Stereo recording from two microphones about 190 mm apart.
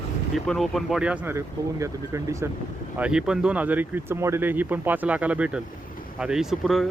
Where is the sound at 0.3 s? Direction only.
Centre (ahead or behind); by 2.5 s 15° right (ahead or behind).